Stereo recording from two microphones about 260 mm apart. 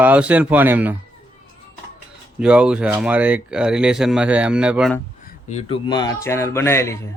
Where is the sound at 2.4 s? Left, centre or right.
Centre.